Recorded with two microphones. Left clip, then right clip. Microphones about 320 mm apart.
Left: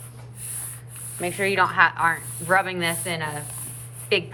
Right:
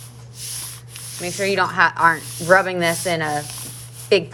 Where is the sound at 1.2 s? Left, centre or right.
Centre.